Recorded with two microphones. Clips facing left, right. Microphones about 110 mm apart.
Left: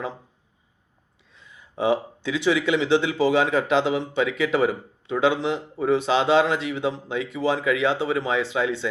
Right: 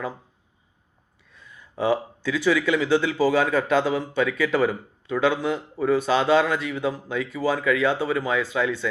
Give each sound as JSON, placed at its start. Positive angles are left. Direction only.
{"t": 1.3, "sound": "speech", "side_deg": 20}